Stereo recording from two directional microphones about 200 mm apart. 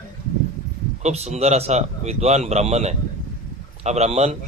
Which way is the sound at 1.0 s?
35° right (ahead or behind).